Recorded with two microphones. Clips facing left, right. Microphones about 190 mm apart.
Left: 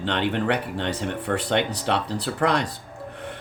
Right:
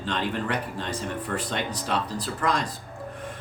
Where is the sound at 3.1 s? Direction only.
70° left (ahead or behind).